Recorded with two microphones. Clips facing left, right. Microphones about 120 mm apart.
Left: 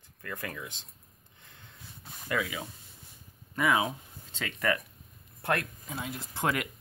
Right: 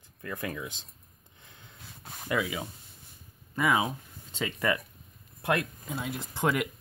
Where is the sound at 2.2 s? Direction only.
20° right (ahead or behind).